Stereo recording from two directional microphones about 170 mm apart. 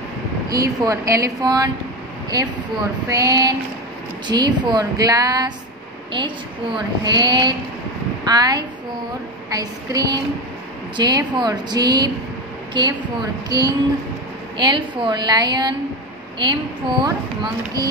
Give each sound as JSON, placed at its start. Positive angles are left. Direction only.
{"t": 0.5, "sound": "a woman's voice", "side_deg": -20}